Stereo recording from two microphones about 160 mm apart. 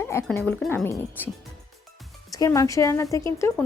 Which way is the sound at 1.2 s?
10° left (ahead or behind).